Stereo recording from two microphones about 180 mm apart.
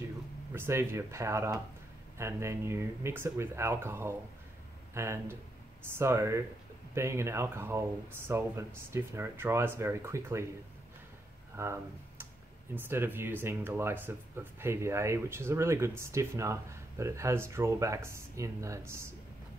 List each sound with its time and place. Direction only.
0.5 s speech: 15° right (ahead or behind)
11.5 s speech: 15° right (ahead or behind)